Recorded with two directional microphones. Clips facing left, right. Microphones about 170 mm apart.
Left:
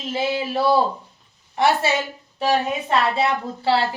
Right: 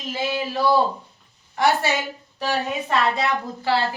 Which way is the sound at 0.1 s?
20° left (ahead or behind).